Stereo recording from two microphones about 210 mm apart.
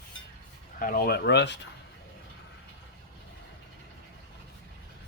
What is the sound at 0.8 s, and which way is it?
Speech, 45° left (ahead or behind).